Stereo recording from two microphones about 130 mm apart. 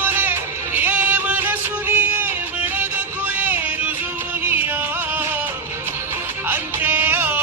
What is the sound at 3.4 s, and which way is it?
Music, 15° right (ahead or behind).